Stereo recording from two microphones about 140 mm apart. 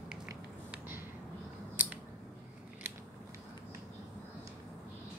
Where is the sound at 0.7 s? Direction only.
15° right (ahead or behind).